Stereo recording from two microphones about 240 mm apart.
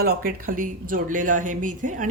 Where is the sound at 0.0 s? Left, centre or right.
Right.